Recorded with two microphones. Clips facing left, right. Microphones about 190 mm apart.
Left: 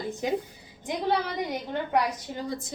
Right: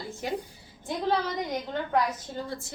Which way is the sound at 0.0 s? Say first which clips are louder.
Left 4 dB; 20° left (ahead or behind).